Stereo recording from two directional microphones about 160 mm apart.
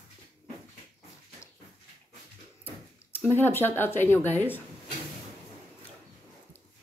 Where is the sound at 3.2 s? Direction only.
15° left (ahead or behind).